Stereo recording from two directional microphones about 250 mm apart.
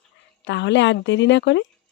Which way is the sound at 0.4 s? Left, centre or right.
Left.